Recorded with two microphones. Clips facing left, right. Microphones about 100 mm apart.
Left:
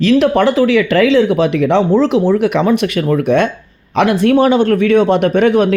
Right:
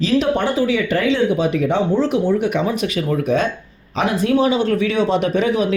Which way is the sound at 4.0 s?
75° left (ahead or behind).